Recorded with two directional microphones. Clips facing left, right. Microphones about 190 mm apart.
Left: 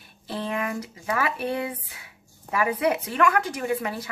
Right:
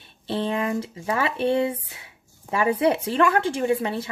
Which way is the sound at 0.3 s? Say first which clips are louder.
Right 4 dB; 25° right (ahead or behind).